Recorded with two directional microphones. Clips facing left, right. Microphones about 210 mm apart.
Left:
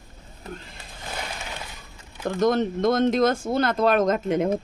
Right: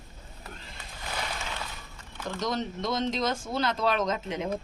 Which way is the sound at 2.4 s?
55° left (ahead or behind).